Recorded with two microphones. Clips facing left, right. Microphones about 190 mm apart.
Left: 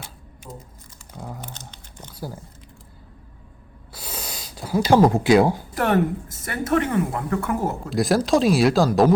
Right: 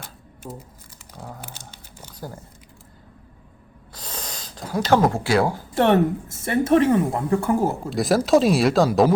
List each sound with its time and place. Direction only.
1.4 s crumpling: 10° right (ahead or behind)
2.1 s speech: 10° left (ahead or behind)
3.9 s a sound: 10° left (ahead or behind)
5.7 s a woman's voice: 30° right (ahead or behind)
7.9 s speech: centre (ahead or behind)